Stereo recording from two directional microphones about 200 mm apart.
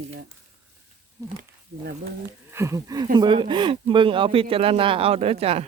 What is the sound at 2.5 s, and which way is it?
Speech, 15° right (ahead or behind).